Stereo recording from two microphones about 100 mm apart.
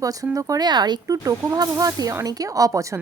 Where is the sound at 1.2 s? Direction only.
35° right (ahead or behind).